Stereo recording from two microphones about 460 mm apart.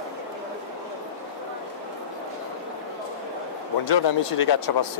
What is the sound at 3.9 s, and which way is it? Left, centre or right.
Speech, left.